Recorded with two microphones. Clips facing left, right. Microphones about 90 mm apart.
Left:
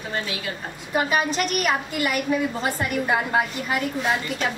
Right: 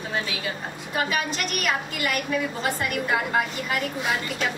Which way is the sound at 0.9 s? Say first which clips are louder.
Left 4 dB; 30° left (ahead or behind).